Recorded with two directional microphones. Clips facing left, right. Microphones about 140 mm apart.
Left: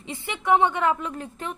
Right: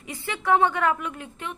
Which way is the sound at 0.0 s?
25° left (ahead or behind).